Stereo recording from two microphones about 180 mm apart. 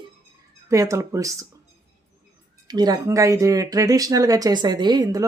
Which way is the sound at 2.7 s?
20° right (ahead or behind).